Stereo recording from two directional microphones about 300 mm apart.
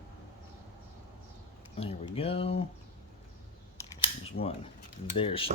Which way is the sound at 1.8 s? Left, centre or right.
Centre.